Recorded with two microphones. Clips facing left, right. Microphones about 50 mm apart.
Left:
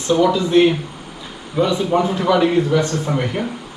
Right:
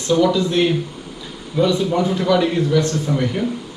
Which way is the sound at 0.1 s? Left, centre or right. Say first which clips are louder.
Left 2 dB; centre.